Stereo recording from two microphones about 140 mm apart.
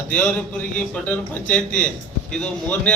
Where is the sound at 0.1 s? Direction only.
10° left (ahead or behind).